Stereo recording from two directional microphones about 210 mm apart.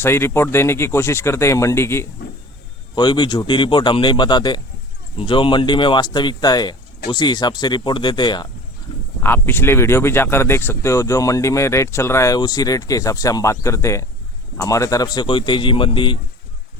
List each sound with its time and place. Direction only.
0.0 s speech: 10° left (ahead or behind)
9.2 s speech: 10° left (ahead or behind)